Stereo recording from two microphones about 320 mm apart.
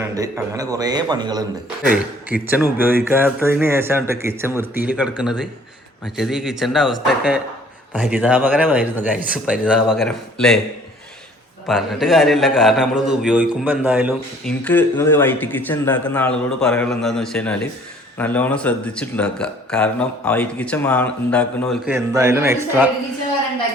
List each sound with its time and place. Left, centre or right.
0.0 s speech: centre
11.7 s speech: centre